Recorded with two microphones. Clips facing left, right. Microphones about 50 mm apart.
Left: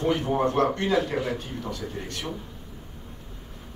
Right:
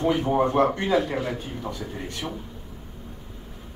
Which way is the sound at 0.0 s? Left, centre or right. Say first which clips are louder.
Right 2 dB; centre.